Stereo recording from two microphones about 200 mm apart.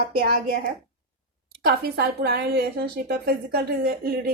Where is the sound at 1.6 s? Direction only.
55° right (ahead or behind).